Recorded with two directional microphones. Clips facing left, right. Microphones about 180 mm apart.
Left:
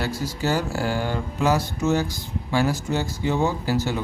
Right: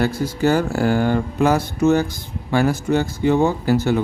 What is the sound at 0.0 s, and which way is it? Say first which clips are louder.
Speech: right 7 dB; 55° right (ahead or behind).